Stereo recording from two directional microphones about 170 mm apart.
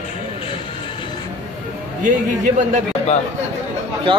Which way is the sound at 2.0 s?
45° right (ahead or behind).